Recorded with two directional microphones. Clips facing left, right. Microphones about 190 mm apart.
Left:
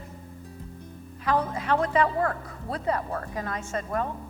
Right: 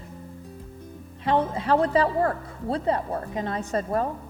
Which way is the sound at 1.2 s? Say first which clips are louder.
Right 3 dB; 25° right (ahead or behind).